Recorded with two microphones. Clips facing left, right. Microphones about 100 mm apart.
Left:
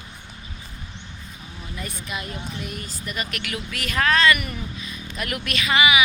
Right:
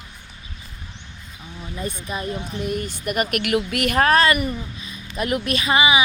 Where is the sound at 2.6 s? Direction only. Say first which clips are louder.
Right 8 dB; 45° right (ahead or behind).